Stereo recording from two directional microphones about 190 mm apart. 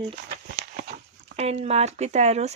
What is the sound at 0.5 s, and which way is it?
Speech, 40° right (ahead or behind).